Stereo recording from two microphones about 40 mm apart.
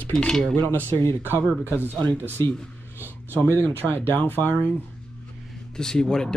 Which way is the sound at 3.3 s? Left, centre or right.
Right.